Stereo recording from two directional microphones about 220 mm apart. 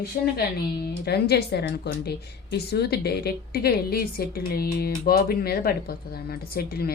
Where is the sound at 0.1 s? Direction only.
40° left (ahead or behind).